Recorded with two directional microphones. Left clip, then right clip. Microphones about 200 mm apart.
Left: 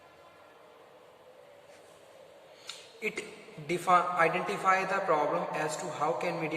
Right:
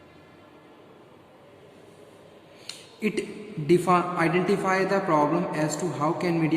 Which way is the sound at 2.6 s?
30° right (ahead or behind).